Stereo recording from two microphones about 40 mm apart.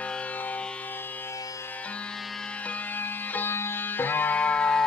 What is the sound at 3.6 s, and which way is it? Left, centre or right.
Sitar, left.